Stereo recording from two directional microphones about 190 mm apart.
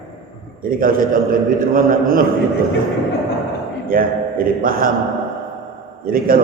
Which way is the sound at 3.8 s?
50° right (ahead or behind).